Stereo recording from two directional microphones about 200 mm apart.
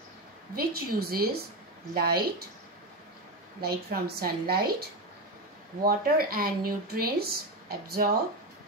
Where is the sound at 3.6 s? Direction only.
50° right (ahead or behind).